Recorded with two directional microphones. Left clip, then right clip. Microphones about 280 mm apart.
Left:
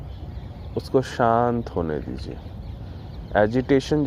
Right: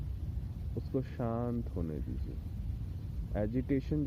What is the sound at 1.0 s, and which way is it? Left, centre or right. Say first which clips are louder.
Speech: left 18 dB; centre.